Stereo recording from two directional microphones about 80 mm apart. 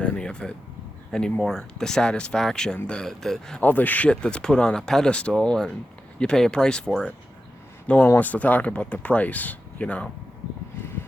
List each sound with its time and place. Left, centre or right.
0.0 s a sound: centre
1.4 s speech: centre
3.6 s speech: left